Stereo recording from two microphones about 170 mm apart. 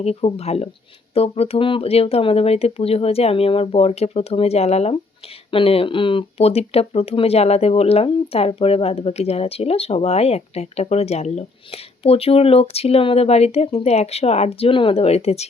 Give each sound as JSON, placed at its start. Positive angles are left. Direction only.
{"t": 0.0, "sound": "speech", "side_deg": 35}